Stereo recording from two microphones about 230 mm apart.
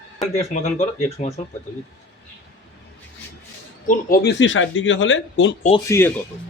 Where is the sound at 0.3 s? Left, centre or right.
Left.